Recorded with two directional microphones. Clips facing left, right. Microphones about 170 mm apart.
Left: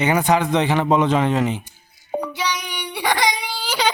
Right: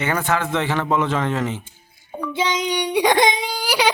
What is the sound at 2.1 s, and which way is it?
Child singing, 70° left (ahead or behind).